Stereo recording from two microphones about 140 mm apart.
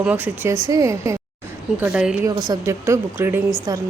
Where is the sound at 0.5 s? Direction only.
25° right (ahead or behind).